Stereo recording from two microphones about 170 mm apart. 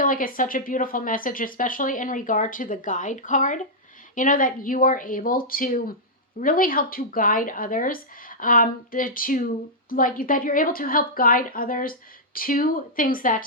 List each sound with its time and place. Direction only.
0.0 s a woman's voice: 55° left (ahead or behind)